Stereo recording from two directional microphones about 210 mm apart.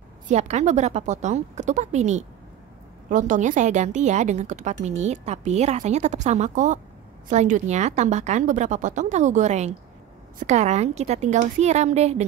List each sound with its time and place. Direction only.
0.3 s a woman's voice: 30° right (ahead or behind)